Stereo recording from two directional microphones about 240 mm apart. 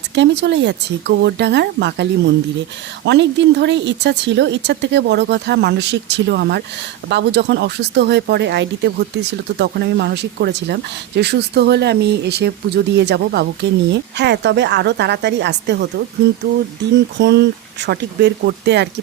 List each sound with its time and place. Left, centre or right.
0.1 s speech: right